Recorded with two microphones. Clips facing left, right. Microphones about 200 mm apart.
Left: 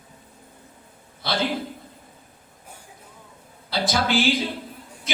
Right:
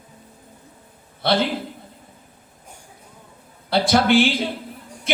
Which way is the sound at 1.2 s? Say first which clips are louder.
Right 7 dB; 60° right (ahead or behind).